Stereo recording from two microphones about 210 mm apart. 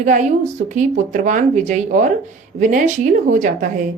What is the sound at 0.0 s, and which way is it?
A woman's voice, 35° right (ahead or behind).